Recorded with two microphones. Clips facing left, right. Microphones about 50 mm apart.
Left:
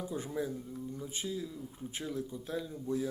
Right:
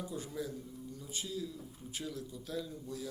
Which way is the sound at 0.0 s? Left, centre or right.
Left.